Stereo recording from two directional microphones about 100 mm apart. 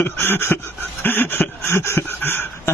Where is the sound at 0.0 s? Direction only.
20° left (ahead or behind).